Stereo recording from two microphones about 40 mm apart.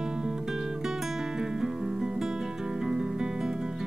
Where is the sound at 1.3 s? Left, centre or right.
Centre.